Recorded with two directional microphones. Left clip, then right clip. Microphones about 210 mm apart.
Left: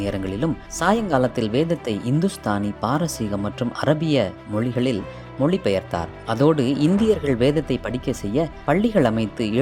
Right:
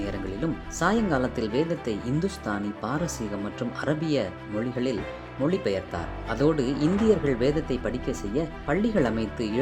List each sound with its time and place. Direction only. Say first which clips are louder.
0.0 s speech: left 6 dB; 30° left (ahead or behind)